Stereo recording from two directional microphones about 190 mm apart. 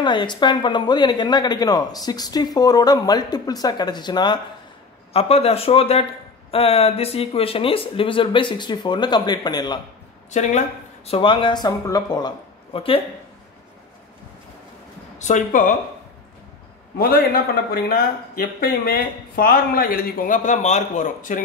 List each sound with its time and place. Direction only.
0.0 s speech: 25° left (ahead or behind)
10.3 s speech: 35° left (ahead or behind)
11.1 s speech: 25° left (ahead or behind)
15.1 s speech: 40° left (ahead or behind)
17.0 s a man's voice: 55° left (ahead or behind)